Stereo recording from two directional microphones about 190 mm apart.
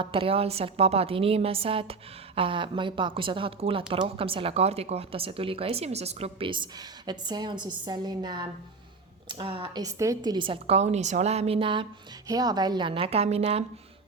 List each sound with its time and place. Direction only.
0.0 s a woman's voice: 30° right (ahead or behind)